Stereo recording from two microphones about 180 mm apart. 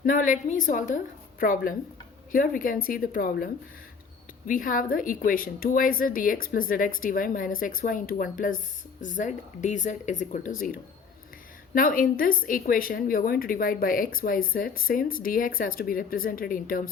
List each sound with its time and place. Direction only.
0.0 s a woman's voice: 50° left (ahead or behind)